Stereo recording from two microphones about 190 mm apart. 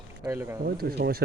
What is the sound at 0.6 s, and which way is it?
Speech, 55° right (ahead or behind).